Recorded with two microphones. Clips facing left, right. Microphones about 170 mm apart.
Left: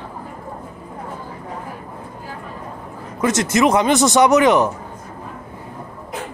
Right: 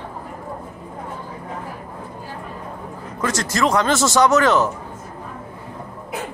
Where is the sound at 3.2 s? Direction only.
20° left (ahead or behind).